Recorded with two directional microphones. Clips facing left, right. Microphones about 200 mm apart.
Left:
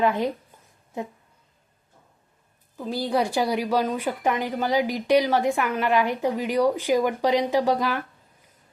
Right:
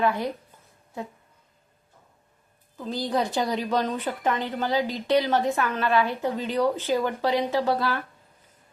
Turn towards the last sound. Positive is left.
turn(degrees=15)  # may be behind; listen again after turning